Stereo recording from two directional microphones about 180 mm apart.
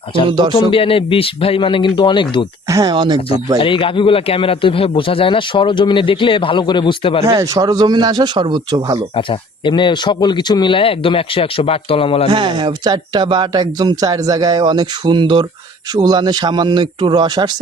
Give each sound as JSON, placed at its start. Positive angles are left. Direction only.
{"t": 0.3, "sound": "speech", "side_deg": -25}
{"t": 0.7, "sound": "a man's voice", "side_deg": 30}
{"t": 2.6, "sound": "speech", "side_deg": -20}
{"t": 3.6, "sound": "a man's voice", "side_deg": 30}
{"t": 7.3, "sound": "speech", "side_deg": -20}
{"t": 9.1, "sound": "a man's voice", "side_deg": 30}
{"t": 12.3, "sound": "speech", "side_deg": -25}